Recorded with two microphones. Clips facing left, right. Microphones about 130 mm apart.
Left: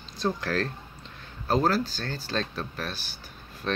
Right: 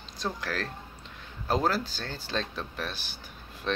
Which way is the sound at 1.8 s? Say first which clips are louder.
Left 3 dB; 20° right (ahead or behind).